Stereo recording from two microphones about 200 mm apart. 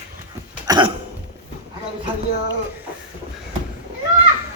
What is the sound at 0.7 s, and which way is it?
Speech, 20° right (ahead or behind).